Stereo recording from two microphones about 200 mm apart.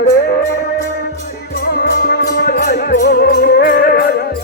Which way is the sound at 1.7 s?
50° left (ahead or behind).